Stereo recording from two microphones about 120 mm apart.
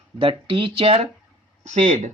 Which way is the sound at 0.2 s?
45° right (ahead or behind).